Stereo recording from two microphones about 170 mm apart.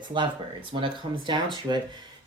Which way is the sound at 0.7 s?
30° right (ahead or behind).